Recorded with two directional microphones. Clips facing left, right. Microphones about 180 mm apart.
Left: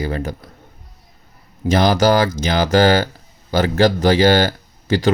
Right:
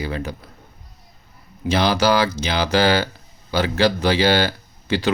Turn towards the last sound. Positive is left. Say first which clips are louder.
# left 4 dB
turn(degrees=45)  # may be behind; listen again after turning